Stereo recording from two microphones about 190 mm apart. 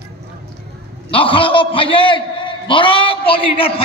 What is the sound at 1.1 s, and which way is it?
A man's voice, 30° left (ahead or behind).